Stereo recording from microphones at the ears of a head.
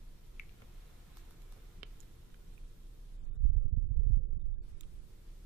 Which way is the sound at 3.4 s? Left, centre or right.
Right.